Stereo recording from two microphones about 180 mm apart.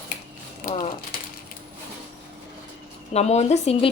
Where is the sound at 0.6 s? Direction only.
55° left (ahead or behind).